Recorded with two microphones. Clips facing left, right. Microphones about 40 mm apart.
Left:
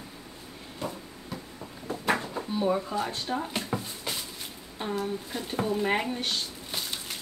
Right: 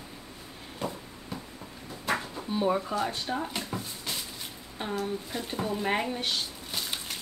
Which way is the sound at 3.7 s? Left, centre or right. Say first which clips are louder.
Left 4 dB; centre.